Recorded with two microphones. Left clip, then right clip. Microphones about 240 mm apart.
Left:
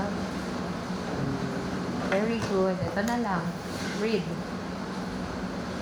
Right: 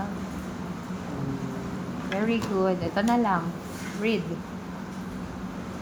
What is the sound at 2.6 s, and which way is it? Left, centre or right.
Speech, right.